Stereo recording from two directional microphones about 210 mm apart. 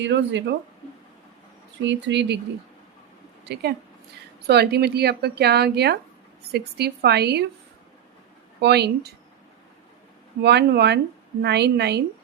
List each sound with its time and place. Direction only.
0.0 s speech: 55° right (ahead or behind)
1.8 s speech: 55° right (ahead or behind)
3.5 s speech: 50° right (ahead or behind)
8.6 s speech: 50° right (ahead or behind)
10.4 s speech: 55° right (ahead or behind)